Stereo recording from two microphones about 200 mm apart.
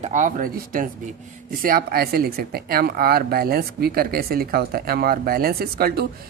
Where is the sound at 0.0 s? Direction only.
40° right (ahead or behind).